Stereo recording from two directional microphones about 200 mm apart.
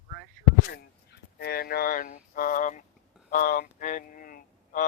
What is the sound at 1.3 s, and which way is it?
Speech, 50° left (ahead or behind).